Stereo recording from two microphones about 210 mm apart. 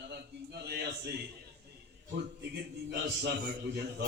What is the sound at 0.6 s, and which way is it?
Speech, 50° right (ahead or behind).